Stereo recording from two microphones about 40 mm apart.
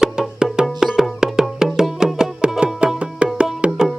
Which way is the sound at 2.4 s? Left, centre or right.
Right.